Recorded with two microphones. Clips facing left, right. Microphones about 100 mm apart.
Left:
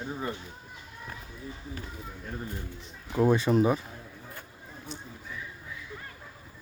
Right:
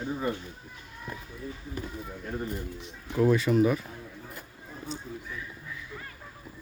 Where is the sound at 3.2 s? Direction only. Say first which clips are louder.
Even; 25° left (ahead or behind).